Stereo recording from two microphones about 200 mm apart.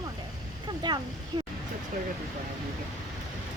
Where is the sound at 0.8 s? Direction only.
20° right (ahead or behind).